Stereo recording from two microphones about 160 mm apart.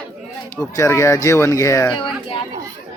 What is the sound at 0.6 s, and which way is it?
Speech, 15° left (ahead or behind).